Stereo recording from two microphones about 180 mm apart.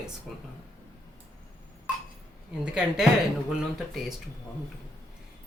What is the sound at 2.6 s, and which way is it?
Speech, 5° right (ahead or behind).